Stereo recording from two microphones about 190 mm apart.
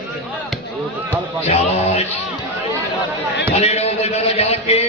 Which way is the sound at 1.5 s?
35° left (ahead or behind).